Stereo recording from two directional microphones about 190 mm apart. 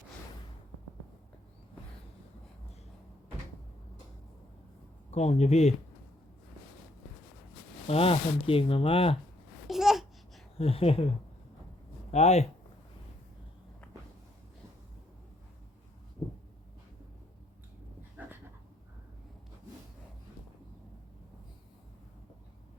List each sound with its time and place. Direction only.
5.1 s speech: 35° left (ahead or behind)
7.9 s speech: 30° left (ahead or behind)
9.6 s babbling: centre (ahead or behind)
10.6 s speech: 30° left (ahead or behind)
12.1 s speech: 35° left (ahead or behind)
13.8 s a sound: 5° left (ahead or behind)
16.2 s a sound: 15° left (ahead or behind)
18.2 s dog: 10° right (ahead or behind)